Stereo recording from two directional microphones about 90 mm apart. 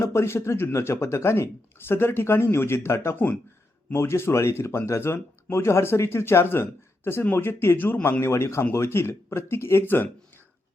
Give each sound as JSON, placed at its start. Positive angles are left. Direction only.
{"t": 0.0, "sound": "speech", "side_deg": 30}